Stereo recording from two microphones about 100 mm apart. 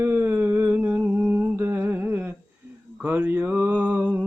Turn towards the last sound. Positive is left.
turn(degrees=-15)  # may be behind; listen again after turning